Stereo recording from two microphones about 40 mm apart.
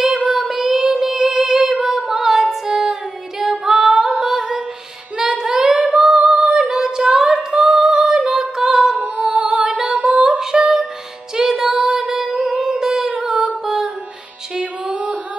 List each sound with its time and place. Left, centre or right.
0.1 s child singing: centre
0.9 s female singing: centre
4.2 s humming: centre
5.1 s female singing: centre
6.1 s singing: centre
8.3 s female singing: centre
8.9 s music: right
9.2 s music: centre
9.9 s female singing: right
10.4 s music: centre
11.6 s female singing: centre
12.6 s music: centre
13.2 s humming: centre
14.5 s music: centre